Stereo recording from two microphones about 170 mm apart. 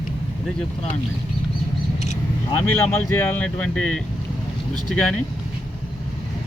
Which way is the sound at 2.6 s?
15° left (ahead or behind).